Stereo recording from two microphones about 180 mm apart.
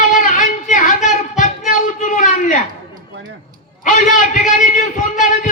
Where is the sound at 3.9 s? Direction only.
45° left (ahead or behind).